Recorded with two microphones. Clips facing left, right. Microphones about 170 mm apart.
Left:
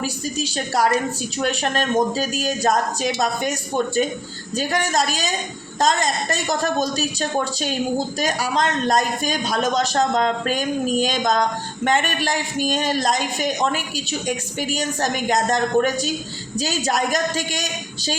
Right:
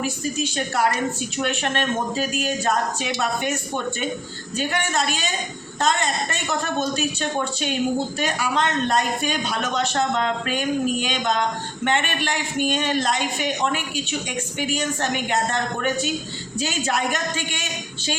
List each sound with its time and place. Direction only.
0.0 s a woman's voice: 35° left (ahead or behind)